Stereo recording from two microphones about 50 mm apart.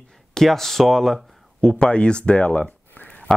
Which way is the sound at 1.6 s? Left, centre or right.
Centre.